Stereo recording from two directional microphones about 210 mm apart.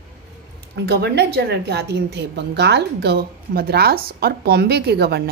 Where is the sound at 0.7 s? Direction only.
55° right (ahead or behind).